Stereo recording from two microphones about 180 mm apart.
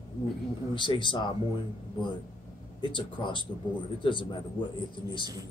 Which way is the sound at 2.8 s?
25° left (ahead or behind).